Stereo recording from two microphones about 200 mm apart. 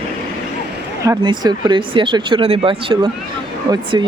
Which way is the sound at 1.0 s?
20° right (ahead or behind).